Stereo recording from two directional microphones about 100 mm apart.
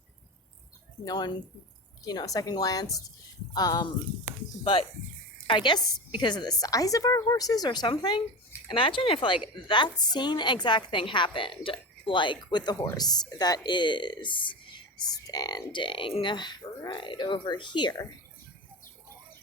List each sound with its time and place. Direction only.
1.0 s a woman's voice: 45° left (ahead or behind)
4.6 s speech: 65° left (ahead or behind)
5.5 s a woman's voice: 50° left (ahead or behind)
8.6 s a woman's voice: 60° left (ahead or behind)
12.7 s a woman's voice: 35° left (ahead or behind); by 14.6 s 55° left (ahead or behind)
15.0 s a woman's voice: 45° left (ahead or behind)